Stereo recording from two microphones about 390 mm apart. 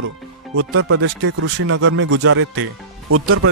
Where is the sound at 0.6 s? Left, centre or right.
Right.